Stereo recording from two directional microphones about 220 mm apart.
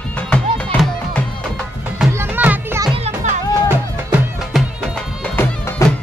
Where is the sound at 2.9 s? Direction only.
30° right (ahead or behind).